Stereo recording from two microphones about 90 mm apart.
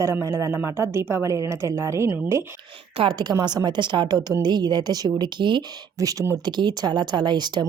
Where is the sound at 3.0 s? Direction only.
90° right.